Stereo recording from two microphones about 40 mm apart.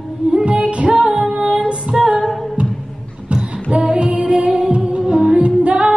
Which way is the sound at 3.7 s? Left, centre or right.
Right.